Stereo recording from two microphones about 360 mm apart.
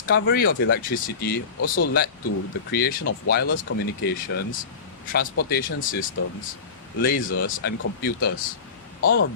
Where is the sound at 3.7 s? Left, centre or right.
Left.